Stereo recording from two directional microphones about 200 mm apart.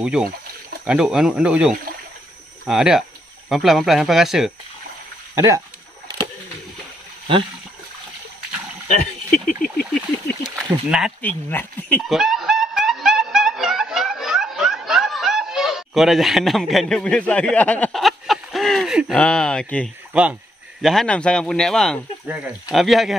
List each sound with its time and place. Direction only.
0.0 s speech: 5° right (ahead or behind)
5.3 s speech: 15° right (ahead or behind)
9.9 s speech: centre (ahead or behind)
11.2 s snicker: 10° left (ahead or behind)
20.1 s speech: 5° right (ahead or behind)